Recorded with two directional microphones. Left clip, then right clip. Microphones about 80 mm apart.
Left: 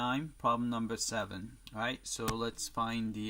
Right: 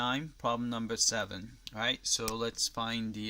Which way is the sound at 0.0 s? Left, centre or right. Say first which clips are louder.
Even; centre.